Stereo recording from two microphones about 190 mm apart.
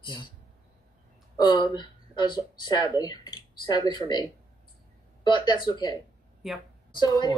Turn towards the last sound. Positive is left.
turn(degrees=20)  # may be behind; listen again after turning